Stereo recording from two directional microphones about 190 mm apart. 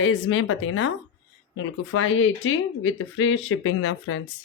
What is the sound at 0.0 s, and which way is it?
Speech, 90° left.